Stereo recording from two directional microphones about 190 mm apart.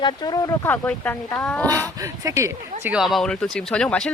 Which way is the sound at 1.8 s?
20° right (ahead or behind).